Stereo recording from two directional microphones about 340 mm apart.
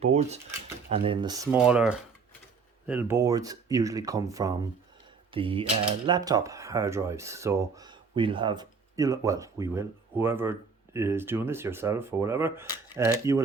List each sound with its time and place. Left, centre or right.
0.0 s a sound: centre
0.9 s speech: centre
1.5 s speech: centre